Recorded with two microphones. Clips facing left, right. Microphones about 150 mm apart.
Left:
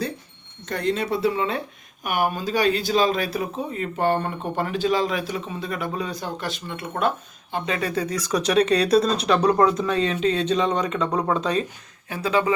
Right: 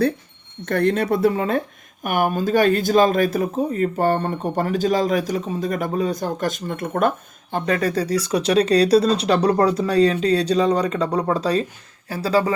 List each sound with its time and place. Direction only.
0.6 s a man's voice: 55° right (ahead or behind); by 12.5 s 35° right (ahead or behind)